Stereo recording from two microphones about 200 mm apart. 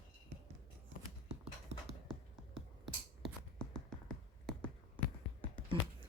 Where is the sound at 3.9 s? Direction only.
Centre (ahead or behind).